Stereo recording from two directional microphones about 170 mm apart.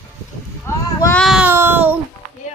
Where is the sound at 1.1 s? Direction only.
Centre (ahead or behind).